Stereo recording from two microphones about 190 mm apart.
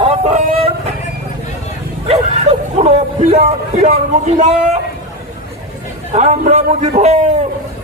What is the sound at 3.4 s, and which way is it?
A man's voice, 35° right (ahead or behind).